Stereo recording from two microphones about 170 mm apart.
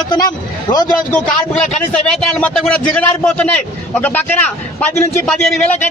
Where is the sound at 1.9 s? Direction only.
5° left (ahead or behind).